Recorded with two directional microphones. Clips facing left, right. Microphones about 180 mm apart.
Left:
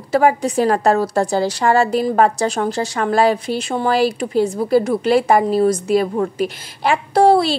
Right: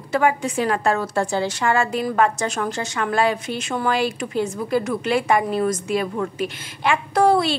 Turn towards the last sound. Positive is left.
turn(degrees=35)  # may be behind; listen again after turning